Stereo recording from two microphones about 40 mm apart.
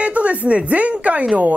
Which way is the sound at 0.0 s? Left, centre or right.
Right.